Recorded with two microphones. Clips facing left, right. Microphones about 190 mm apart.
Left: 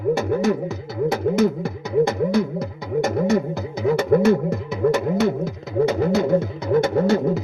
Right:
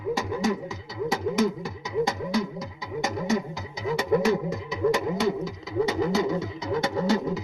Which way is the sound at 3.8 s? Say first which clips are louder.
Left 7 dB; 60° left (ahead or behind).